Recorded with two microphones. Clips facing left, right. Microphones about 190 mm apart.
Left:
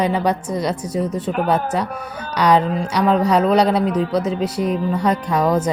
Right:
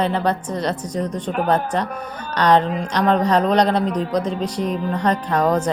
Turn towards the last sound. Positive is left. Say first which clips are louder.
# left 1 dB
turn(degrees=10)  # may be behind; listen again after turning